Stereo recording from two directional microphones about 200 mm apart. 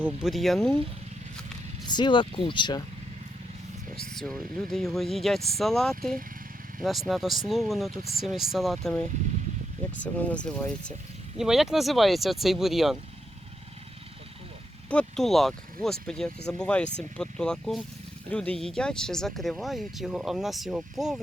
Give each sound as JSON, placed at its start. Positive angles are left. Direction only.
{"t": 0.0, "sound": "speech", "side_deg": 0}
{"t": 1.9, "sound": "speech", "side_deg": 25}
{"t": 4.0, "sound": "speech", "side_deg": 5}
{"t": 14.8, "sound": "speech", "side_deg": 5}